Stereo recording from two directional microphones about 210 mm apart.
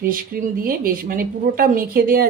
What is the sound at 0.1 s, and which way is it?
A woman's voice, 40° right (ahead or behind).